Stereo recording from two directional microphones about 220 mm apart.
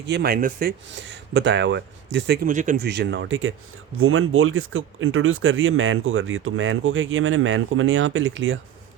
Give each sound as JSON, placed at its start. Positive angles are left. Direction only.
{"t": 0.1, "sound": "speech", "side_deg": -45}
{"t": 0.9, "sound": "speech", "side_deg": -55}
{"t": 2.8, "sound": "speech", "side_deg": -50}